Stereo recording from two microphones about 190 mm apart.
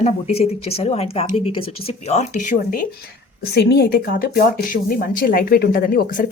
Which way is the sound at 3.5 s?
60° left (ahead or behind).